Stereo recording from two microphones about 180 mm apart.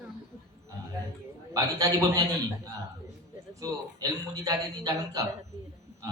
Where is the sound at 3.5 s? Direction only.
20° right (ahead or behind).